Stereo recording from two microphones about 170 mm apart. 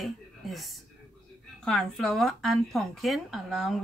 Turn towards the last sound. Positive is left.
turn(degrees=0)  # may be behind; listen again after turning